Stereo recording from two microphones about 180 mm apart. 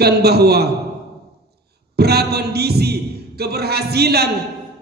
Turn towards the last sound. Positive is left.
turn(degrees=-65)  # may be behind; listen again after turning